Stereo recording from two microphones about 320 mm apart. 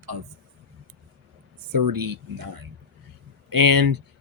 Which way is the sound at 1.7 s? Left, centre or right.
Right.